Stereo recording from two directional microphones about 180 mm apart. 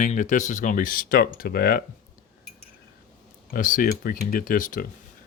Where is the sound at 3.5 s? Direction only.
50° left (ahead or behind).